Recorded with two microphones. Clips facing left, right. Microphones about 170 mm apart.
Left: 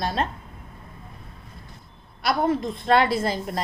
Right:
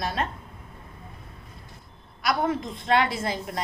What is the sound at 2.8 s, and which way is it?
Speech, 35° left (ahead or behind).